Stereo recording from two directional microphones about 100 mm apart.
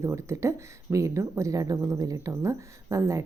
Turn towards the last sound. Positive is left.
turn(degrees=-30)  # may be behind; listen again after turning